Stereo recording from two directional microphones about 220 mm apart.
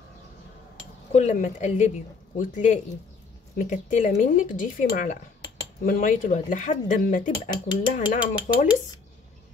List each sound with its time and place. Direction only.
1.1 s speech: 30° left (ahead or behind)